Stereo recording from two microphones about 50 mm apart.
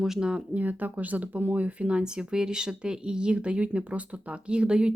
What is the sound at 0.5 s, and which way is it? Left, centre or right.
Speech, right.